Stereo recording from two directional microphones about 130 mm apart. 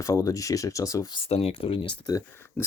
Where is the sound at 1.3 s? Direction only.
50° left (ahead or behind).